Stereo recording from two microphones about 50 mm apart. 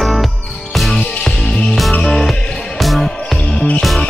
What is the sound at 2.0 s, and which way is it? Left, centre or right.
Music, centre.